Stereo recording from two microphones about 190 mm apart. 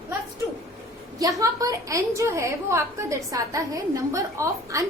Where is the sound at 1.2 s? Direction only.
20° right (ahead or behind).